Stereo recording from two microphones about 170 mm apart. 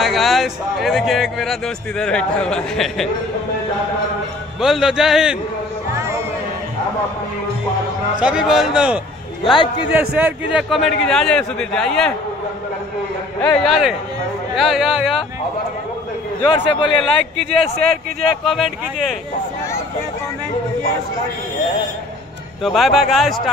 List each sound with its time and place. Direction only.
0.0 s speech: centre (ahead or behind)
4.6 s speech: centre (ahead or behind)
8.2 s speech: 5° right (ahead or behind)
9.4 s a man's voice: 30° left (ahead or behind)
9.9 s a man's voice: 10° right (ahead or behind)
10.9 s speech: 5° left (ahead or behind)
13.4 s speech: 5° left (ahead or behind)
16.4 s a man's voice: 30° left (ahead or behind)
17.0 s speech: 5° left (ahead or behind)
22.6 s speech: centre (ahead or behind)